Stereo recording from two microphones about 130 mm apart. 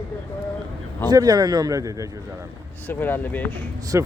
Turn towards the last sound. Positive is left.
turn(degrees=-20)  # may be behind; listen again after turning